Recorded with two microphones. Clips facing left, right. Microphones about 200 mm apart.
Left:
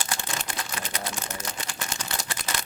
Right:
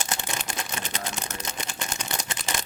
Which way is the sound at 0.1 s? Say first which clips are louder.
Right 1 dB; 20° right (ahead or behind).